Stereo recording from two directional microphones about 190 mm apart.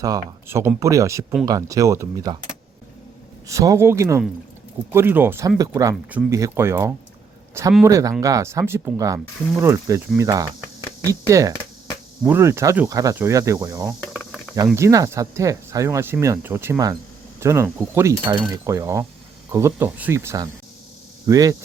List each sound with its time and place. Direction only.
0.0 s speech: 20° right (ahead or behind)
3.4 s speech: 15° right (ahead or behind)
14.1 s a sound: centre (ahead or behind)
14.8 s speech: 15° right (ahead or behind)